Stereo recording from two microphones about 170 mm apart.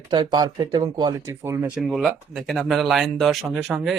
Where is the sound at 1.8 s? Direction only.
Centre (ahead or behind).